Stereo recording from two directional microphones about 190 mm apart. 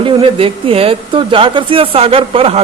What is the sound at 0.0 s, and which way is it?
Speech, 30° right (ahead or behind).